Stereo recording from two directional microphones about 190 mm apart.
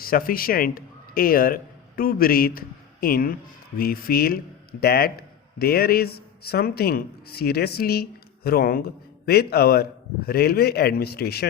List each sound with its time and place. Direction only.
0.0 s a man's voice: 50° left (ahead or behind)